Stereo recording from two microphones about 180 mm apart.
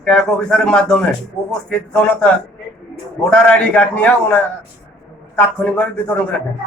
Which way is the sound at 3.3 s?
5° left (ahead or behind).